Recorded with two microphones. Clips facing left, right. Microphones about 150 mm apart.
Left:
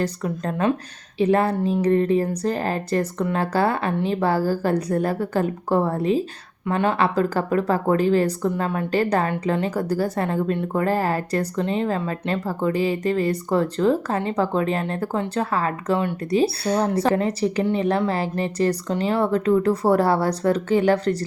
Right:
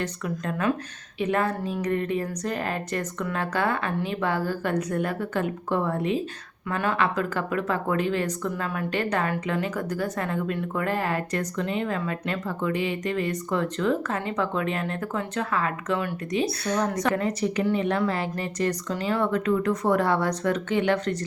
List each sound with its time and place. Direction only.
0.0 s speech: 35° left (ahead or behind)